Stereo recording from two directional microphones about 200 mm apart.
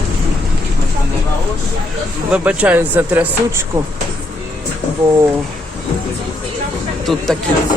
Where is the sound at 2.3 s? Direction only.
5° right (ahead or behind).